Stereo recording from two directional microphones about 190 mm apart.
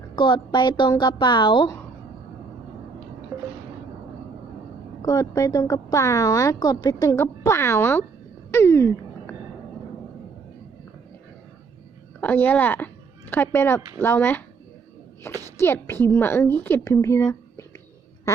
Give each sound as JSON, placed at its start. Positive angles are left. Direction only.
{"t": 0.2, "sound": "speech", "side_deg": 25}
{"t": 3.3, "sound": "a sound", "side_deg": -15}
{"t": 5.0, "sound": "a woman's voice", "side_deg": 15}
{"t": 8.4, "sound": "a sound", "side_deg": 15}
{"t": 12.2, "sound": "a woman's voice", "side_deg": 10}
{"t": 15.5, "sound": "a woman's voice", "side_deg": 10}